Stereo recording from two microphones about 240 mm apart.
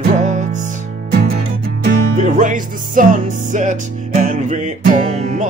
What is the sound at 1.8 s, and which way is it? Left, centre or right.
Music, right.